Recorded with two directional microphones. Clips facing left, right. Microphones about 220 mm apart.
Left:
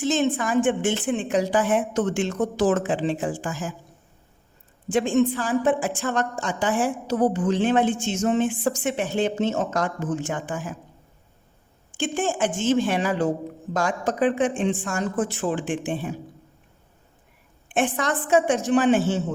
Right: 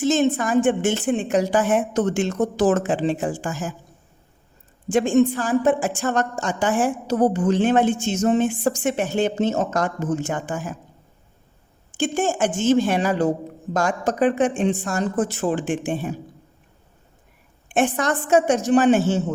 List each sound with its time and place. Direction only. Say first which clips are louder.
0.3 s a woman's voice: right 3 dB; 45° right (ahead or behind)
4.9 s a woman's voice: right 3 dB; 45° right (ahead or behind)
12.1 s a woman's voice: right 2 dB; 45° right (ahead or behind)
17.7 s a woman's voice: right 3 dB; 45° right (ahead or behind)